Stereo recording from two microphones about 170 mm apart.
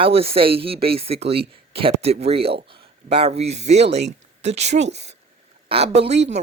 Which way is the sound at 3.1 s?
35° right (ahead or behind).